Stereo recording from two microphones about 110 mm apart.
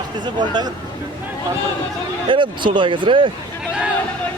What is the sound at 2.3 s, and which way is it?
Speech, 50° right (ahead or behind).